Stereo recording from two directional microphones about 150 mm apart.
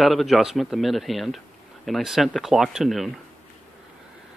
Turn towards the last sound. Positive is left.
turn(degrees=0)  # may be behind; listen again after turning